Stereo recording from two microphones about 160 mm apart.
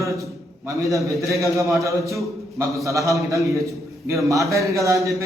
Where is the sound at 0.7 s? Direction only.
20° right (ahead or behind).